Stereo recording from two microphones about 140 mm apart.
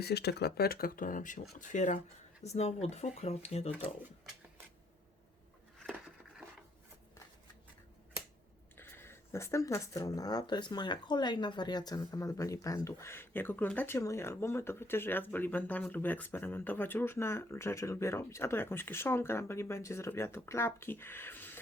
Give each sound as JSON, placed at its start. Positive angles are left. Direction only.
{"t": 0.6, "sound": "speech", "side_deg": 90}
{"t": 2.4, "sound": "speech", "side_deg": 50}
{"t": 8.8, "sound": "speech", "side_deg": 15}